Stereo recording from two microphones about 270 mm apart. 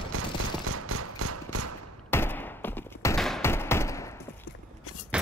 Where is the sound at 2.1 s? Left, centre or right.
Centre.